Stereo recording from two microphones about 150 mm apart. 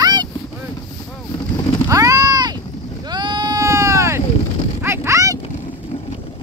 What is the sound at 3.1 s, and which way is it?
Sheep, 30° right (ahead or behind).